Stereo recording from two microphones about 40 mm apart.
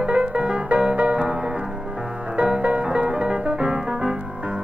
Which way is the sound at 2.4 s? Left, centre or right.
Right.